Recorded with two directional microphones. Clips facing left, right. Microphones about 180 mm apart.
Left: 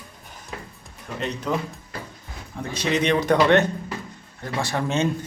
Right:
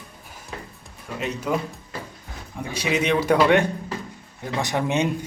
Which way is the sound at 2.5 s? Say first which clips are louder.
Even; 10° right (ahead or behind).